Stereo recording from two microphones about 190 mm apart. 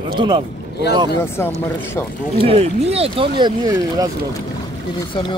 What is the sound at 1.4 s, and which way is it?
Speech, 15° left (ahead or behind).